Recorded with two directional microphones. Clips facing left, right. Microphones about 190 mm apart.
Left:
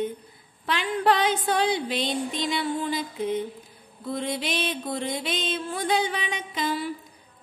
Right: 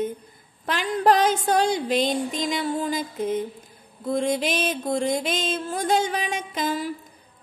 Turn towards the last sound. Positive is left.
turn(degrees=-45)  # may be behind; listen again after turning